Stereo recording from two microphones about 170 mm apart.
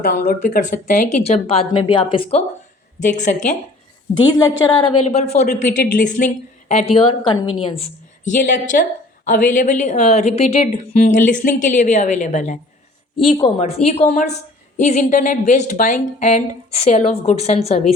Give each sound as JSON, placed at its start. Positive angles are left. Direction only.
{"t": 0.0, "sound": "speech", "side_deg": 55}
{"t": 3.0, "sound": "a woman's voice", "side_deg": 45}
{"t": 4.3, "sound": "a woman's voice", "side_deg": 20}
{"t": 5.0, "sound": "speech", "side_deg": 40}
{"t": 5.5, "sound": "speech", "side_deg": 50}
{"t": 8.2, "sound": "a woman's voice", "side_deg": 50}
{"t": 13.1, "sound": "a woman's voice", "side_deg": 35}